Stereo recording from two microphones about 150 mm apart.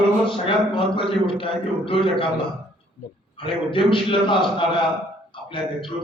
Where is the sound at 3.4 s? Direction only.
35° left (ahead or behind).